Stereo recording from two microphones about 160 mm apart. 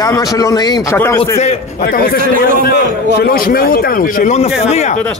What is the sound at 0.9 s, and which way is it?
Speech, 15° left (ahead or behind).